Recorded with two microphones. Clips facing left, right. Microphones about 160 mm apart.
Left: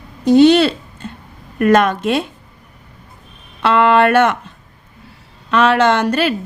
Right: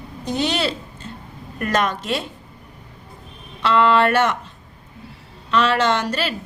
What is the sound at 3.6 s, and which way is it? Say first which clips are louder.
Speech: left 4 dB; 55° left (ahead or behind).